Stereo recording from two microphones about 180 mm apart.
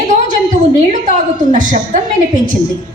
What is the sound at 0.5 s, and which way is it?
A woman's voice, 45° right (ahead or behind).